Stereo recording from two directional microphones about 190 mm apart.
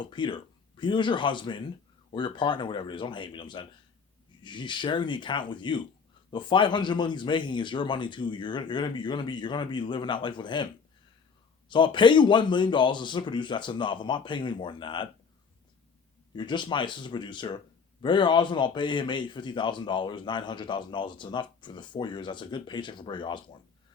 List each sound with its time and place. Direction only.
0.0 s a man's voice: 25° left (ahead or behind)
11.7 s a man's voice: 25° left (ahead or behind)
16.3 s a man's voice: 25° left (ahead or behind)